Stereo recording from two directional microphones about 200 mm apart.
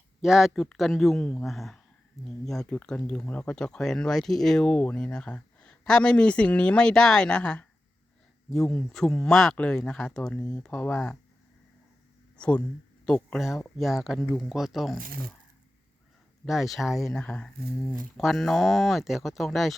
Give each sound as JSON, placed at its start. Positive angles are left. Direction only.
{"t": 0.2, "sound": "speech", "side_deg": 0}
{"t": 12.4, "sound": "speech", "side_deg": 5}
{"t": 15.0, "sound": "speech", "side_deg": -45}
{"t": 16.5, "sound": "speech", "side_deg": 0}